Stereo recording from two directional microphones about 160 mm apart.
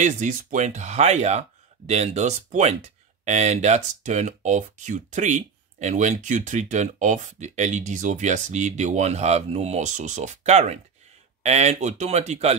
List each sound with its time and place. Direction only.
0.0 s speech: 50° right (ahead or behind)